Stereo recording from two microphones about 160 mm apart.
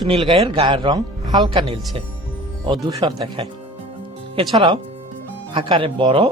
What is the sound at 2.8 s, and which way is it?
Speech, 30° right (ahead or behind).